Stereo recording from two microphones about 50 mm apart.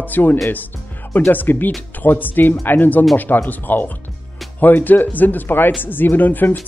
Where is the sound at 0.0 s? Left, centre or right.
Left.